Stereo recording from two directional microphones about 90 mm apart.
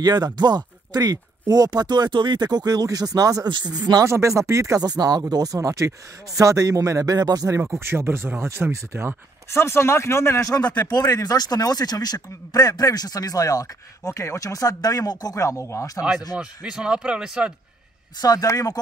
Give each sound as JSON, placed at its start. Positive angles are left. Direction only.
{"t": 0.0, "sound": "speech", "side_deg": -50}
{"t": 3.4, "sound": "speech", "side_deg": -60}
{"t": 4.0, "sound": "a man's voice", "side_deg": -30}
{"t": 7.8, "sound": "speech", "side_deg": -25}
{"t": 9.5, "sound": "speech", "side_deg": 30}
{"t": 10.5, "sound": "speech", "side_deg": 15}
{"t": 10.9, "sound": "speech", "side_deg": 45}
{"t": 16.3, "sound": "speech", "side_deg": -10}
{"t": 18.2, "sound": "speech", "side_deg": 45}